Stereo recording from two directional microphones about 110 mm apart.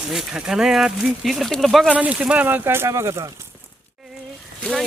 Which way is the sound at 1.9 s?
15° right (ahead or behind).